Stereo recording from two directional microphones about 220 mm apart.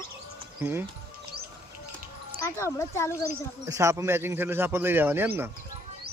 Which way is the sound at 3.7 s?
15° right (ahead or behind).